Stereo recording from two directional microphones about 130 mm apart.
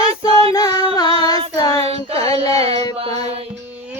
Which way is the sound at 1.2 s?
30° left (ahead or behind).